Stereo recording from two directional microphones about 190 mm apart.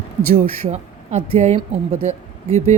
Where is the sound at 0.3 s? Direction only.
35° right (ahead or behind).